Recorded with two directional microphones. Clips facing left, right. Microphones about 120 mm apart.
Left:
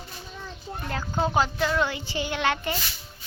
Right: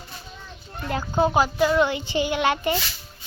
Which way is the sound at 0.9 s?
15° right (ahead or behind).